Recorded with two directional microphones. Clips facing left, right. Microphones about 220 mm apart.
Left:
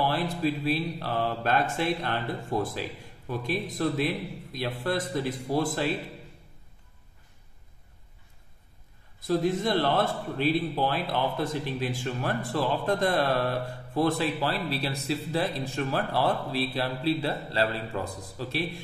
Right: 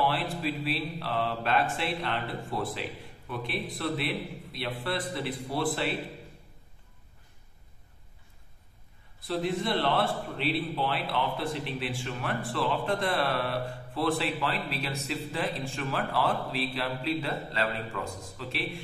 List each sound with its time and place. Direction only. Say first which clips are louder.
0.0 s a man's voice: left 3 dB; 40° left (ahead or behind)
9.3 s a man's voice: left 4 dB; 45° left (ahead or behind)